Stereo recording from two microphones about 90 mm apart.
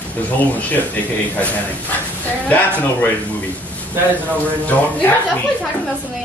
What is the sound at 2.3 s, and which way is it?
Speech, 20° left (ahead or behind).